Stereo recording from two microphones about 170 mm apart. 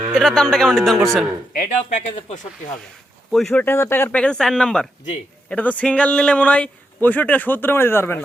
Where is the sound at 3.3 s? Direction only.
Centre (ahead or behind).